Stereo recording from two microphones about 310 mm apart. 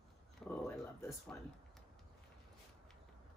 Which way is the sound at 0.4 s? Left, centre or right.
Centre.